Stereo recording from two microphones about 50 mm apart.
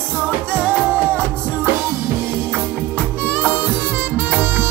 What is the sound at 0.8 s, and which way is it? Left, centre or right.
Music, right.